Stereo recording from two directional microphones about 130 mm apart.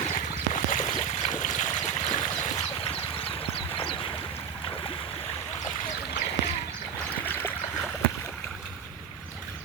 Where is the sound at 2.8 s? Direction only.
45° left (ahead or behind).